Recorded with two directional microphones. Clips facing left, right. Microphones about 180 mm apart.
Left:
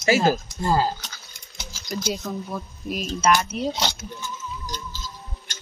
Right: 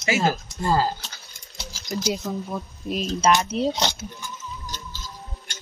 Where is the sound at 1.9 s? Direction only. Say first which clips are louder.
Right 2 dB; 15° right (ahead or behind).